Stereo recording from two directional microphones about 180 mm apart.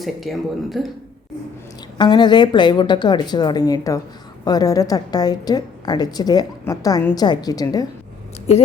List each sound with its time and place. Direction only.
0.0 s speech: centre (ahead or behind)
2.0 s a woman's voice: 25° left (ahead or behind)